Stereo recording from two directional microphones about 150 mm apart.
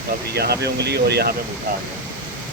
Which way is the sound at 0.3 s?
90° right.